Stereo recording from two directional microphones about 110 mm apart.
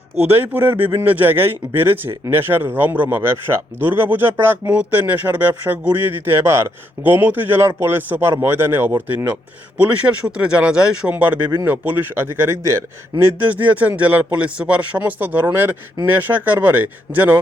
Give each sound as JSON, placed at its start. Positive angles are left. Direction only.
{"t": 0.2, "sound": "a man's voice", "side_deg": -20}